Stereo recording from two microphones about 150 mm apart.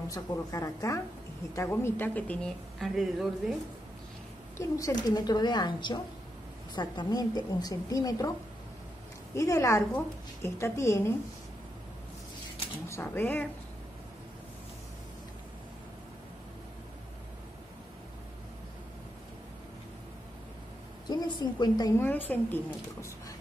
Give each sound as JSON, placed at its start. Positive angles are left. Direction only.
{"t": 0.1, "sound": "a woman's voice", "side_deg": 20}
{"t": 2.8, "sound": "speech", "side_deg": 0}
{"t": 4.6, "sound": "a woman's voice", "side_deg": 20}
{"t": 9.3, "sound": "a woman's voice", "side_deg": 20}
{"t": 12.8, "sound": "a woman's voice", "side_deg": 15}
{"t": 21.1, "sound": "a woman's voice", "side_deg": 30}